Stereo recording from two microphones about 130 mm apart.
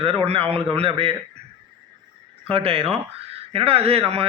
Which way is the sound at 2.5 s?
45° right (ahead or behind).